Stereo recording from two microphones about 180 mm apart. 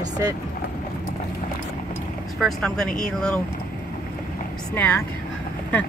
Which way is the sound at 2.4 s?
Centre (ahead or behind).